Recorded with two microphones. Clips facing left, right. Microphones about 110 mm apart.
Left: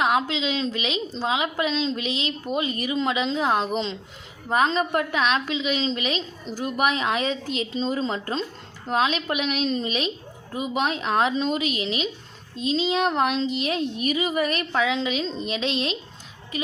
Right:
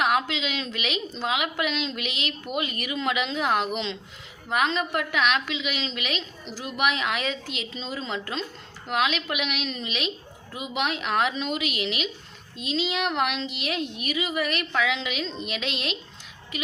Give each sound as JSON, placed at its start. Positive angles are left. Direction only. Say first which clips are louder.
{"t": 0.0, "sound": "a woman's voice", "louder": "left 2 dB", "side_deg": 25}
{"t": 6.5, "sound": "a woman's voice", "louder": "left 3 dB", "side_deg": 45}